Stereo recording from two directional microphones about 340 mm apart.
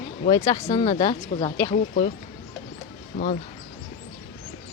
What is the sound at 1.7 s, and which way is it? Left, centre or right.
Speech, left.